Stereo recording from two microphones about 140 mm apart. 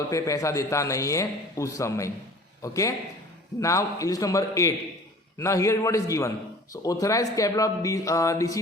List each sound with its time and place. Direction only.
0.1 s a man's voice: 25° left (ahead or behind)